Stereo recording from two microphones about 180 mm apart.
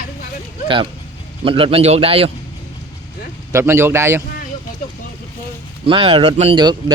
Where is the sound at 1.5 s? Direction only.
30° right (ahead or behind).